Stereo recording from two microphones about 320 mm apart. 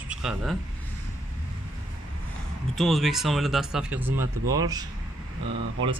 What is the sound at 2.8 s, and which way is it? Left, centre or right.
Speech, centre.